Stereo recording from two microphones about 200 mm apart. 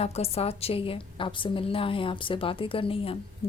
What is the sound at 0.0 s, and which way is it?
A woman's voice, 30° left (ahead or behind).